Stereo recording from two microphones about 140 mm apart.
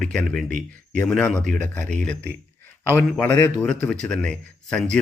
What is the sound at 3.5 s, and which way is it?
Speech, 10° left (ahead or behind).